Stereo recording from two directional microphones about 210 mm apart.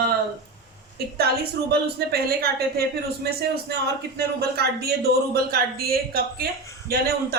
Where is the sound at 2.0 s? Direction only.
50° right (ahead or behind).